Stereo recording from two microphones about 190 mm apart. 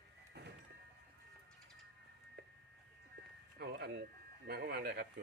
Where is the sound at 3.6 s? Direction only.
55° right (ahead or behind).